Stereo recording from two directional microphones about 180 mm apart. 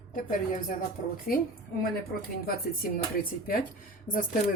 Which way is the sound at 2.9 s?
55° left (ahead or behind).